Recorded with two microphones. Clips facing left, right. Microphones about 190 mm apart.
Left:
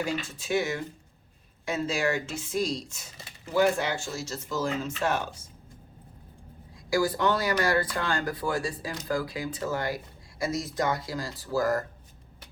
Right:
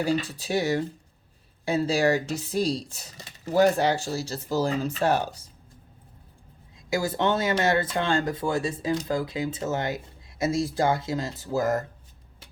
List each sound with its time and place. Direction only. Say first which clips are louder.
0.0 s speech: right 5 dB; 35° right (ahead or behind)
6.9 s speech: even; 25° right (ahead or behind)